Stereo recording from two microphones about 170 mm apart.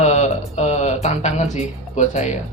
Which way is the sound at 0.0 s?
40° left (ahead or behind).